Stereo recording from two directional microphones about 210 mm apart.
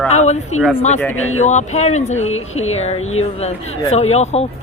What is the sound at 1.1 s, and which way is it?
Speech, 80° left.